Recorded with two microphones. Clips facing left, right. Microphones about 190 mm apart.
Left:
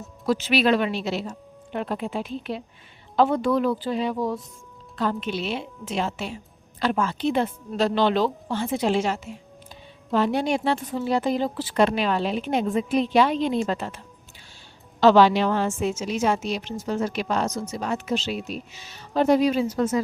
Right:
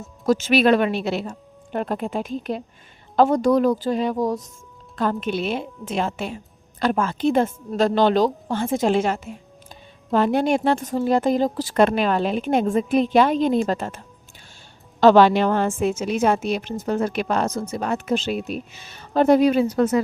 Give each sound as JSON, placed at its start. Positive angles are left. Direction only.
{"t": 0.3, "sound": "a woman's voice", "side_deg": -45}
{"t": 15.0, "sound": "a woman's voice", "side_deg": -50}